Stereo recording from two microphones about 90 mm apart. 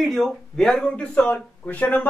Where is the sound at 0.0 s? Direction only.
Centre (ahead or behind).